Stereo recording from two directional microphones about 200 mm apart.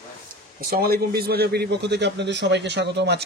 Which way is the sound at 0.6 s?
50° right (ahead or behind).